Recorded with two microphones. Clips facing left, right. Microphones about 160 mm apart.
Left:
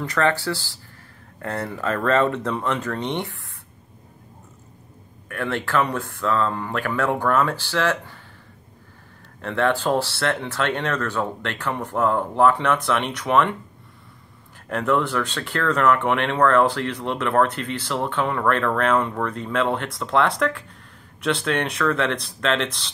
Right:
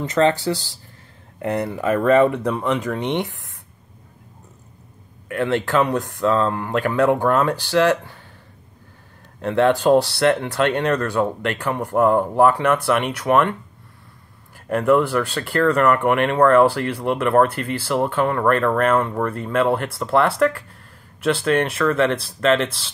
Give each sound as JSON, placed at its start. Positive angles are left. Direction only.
{"t": 0.0, "sound": "speech", "side_deg": -20}
{"t": 5.3, "sound": "speech", "side_deg": -20}
{"t": 9.4, "sound": "speech", "side_deg": -15}
{"t": 14.7, "sound": "speech", "side_deg": -5}